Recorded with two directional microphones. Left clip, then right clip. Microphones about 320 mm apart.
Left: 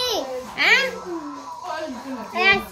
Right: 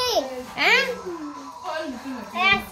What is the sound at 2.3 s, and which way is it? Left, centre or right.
Speech, centre.